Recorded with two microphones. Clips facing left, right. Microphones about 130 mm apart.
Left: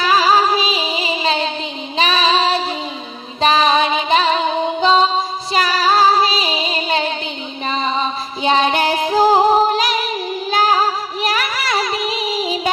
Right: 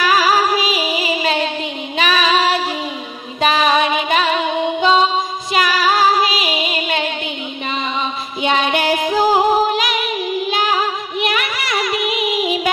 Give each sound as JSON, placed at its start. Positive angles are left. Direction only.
{"t": 0.0, "sound": "music", "side_deg": 25}
{"t": 2.0, "sound": "child singing", "side_deg": 30}
{"t": 3.3, "sound": "music", "side_deg": 30}